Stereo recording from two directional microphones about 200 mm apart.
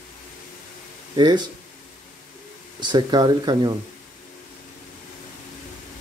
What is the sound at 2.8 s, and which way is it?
Speech, 20° right (ahead or behind).